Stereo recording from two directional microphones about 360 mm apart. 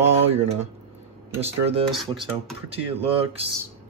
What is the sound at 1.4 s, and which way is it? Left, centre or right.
Speech, centre.